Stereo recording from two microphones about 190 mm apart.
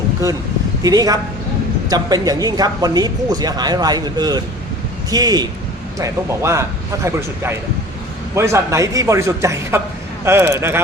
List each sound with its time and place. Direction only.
0.2 s a man's voice: 15° right (ahead or behind)